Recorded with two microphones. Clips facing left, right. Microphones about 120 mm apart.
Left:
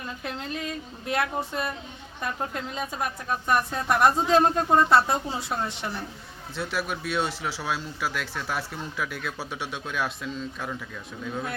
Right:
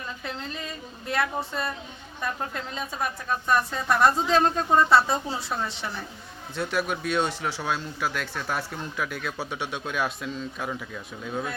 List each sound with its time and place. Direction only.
1.0 s a woman's voice: 10° left (ahead or behind)
6.6 s speech: 5° left (ahead or behind)